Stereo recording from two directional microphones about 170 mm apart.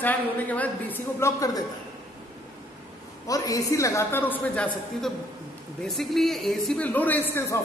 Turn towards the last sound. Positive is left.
turn(degrees=15)  # may be behind; listen again after turning